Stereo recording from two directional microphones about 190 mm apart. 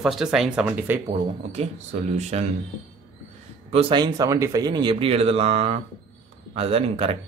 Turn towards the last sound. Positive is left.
turn(degrees=-30)  # may be behind; listen again after turning